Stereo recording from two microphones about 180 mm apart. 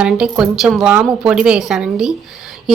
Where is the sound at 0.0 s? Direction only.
5° right (ahead or behind).